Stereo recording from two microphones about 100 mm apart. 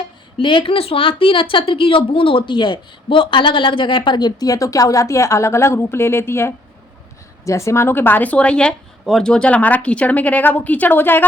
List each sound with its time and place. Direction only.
0.3 s speech: 55° left (ahead or behind); by 11.3 s 20° left (ahead or behind)